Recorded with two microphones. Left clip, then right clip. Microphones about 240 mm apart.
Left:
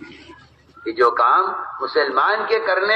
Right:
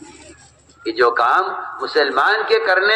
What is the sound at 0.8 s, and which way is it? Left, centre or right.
A man's voice, right.